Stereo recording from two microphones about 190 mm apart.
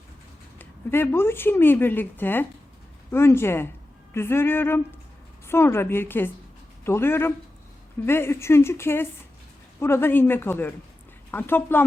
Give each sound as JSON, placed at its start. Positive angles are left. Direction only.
{"t": 0.6, "sound": "speech", "side_deg": 10}